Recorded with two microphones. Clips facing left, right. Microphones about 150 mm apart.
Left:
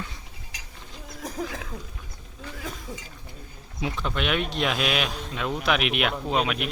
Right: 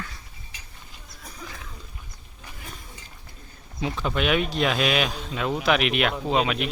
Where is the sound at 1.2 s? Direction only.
90° left.